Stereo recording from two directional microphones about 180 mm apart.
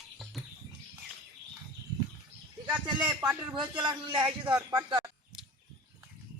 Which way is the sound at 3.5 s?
25° right (ahead or behind).